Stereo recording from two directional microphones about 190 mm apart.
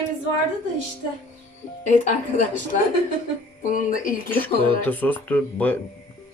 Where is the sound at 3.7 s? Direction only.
45° left (ahead or behind).